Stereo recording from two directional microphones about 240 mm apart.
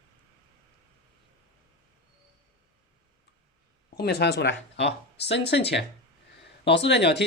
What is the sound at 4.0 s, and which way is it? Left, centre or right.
Speech, left.